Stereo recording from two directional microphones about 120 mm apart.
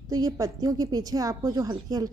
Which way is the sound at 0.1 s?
30° right (ahead or behind).